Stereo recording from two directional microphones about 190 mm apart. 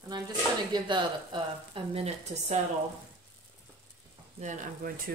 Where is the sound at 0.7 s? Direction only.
25° right (ahead or behind).